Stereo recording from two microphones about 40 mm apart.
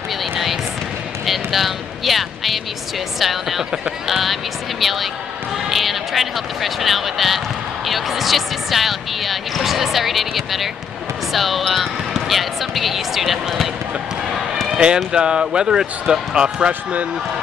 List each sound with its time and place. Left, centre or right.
0.2 s basketball bounce: centre
1.2 s a sound: centre
3.2 s speech: centre
14.7 s run: right
15.1 s speech: right